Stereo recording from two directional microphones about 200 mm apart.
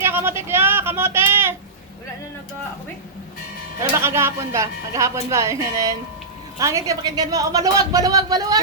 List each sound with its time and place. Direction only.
0.0 s speech: 10° right (ahead or behind)
3.9 s a woman's voice: 10° right (ahead or behind)